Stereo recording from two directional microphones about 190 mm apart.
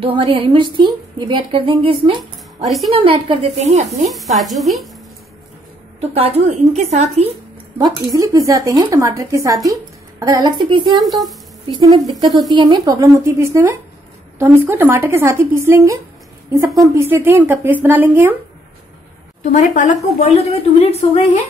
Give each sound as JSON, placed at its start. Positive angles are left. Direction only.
{"t": 0.0, "sound": "a woman's voice", "side_deg": -30}
{"t": 4.1, "sound": "sizzle", "side_deg": 0}
{"t": 5.9, "sound": "a woman's voice", "side_deg": -35}
{"t": 7.8, "sound": "a woman's voice", "side_deg": -15}
{"t": 19.4, "sound": "a woman's voice", "side_deg": 40}